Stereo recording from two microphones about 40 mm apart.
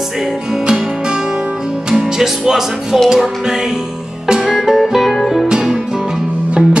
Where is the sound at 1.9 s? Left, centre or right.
Centre.